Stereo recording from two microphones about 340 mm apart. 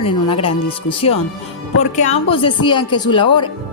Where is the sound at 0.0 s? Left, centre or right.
Centre.